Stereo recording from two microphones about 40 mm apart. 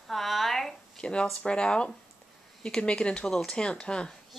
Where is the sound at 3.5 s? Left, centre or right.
Left.